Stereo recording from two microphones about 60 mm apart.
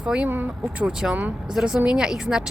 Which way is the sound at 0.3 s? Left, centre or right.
Right.